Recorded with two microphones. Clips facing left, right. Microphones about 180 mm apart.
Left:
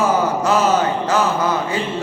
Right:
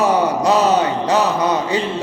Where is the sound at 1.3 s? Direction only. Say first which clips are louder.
Right 2 dB; 20° right (ahead or behind).